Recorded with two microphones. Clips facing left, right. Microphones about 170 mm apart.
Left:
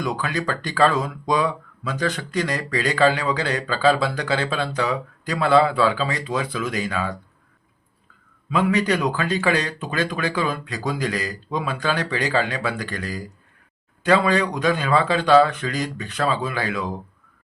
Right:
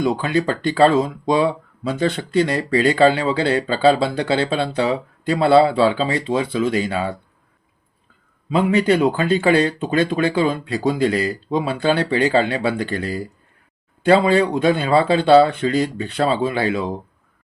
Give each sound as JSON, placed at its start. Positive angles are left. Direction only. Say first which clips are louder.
{"t": 0.0, "sound": "speech", "louder": "right 6 dB", "side_deg": -30}
{"t": 8.4, "sound": "speech", "louder": "right 4 dB", "side_deg": -30}